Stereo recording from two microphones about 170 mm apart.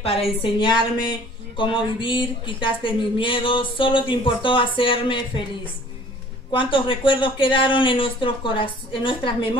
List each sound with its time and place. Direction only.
0.0 s a woman's voice: 35° left (ahead or behind)
6.5 s speech: 30° left (ahead or behind)